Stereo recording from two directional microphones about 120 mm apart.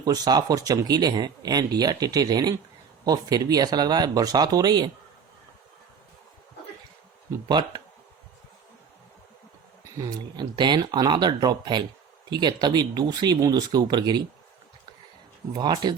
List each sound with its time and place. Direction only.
0.0 s speech: 35° right (ahead or behind)
7.4 s speech: 40° right (ahead or behind)
10.0 s speech: 35° right (ahead or behind)
15.5 s speech: 35° right (ahead or behind)